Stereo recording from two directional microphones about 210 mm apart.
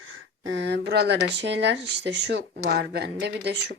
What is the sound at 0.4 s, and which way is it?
Speech, 55° right (ahead or behind).